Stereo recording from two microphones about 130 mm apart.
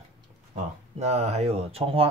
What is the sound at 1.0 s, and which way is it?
Speech, 55° right (ahead or behind).